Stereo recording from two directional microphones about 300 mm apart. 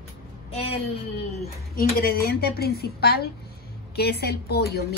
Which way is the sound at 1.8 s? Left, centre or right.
Left.